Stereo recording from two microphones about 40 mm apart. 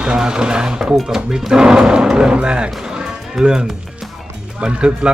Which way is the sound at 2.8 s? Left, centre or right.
Centre.